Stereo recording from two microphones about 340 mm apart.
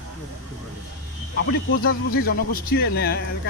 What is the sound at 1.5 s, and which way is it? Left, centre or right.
Speech, left.